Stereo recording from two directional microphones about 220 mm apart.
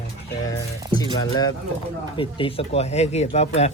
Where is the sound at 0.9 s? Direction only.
20° left (ahead or behind).